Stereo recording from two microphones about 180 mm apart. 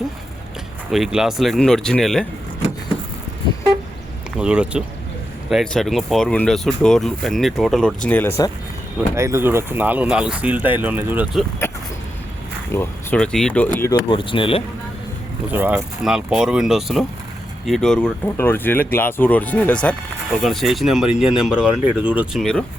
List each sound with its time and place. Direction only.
0.9 s speech: centre (ahead or behind)
4.4 s speech: 5° right (ahead or behind)
9.0 s speech: 15° right (ahead or behind)
11.6 s vehicle: 15° left (ahead or behind)
12.7 s speech: 10° left (ahead or behind)
14.1 s speech: 30° left (ahead or behind)
15.5 s speech: 10° right (ahead or behind)